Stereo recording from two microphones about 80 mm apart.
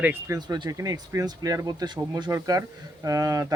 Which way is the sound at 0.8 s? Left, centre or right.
Right.